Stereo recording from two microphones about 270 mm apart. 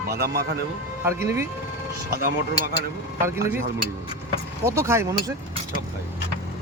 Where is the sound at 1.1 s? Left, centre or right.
Centre.